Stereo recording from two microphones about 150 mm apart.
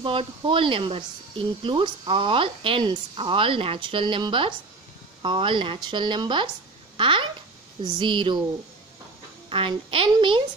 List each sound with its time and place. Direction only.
0.0 s speech: 35° right (ahead or behind)
9.5 s speech: 35° right (ahead or behind)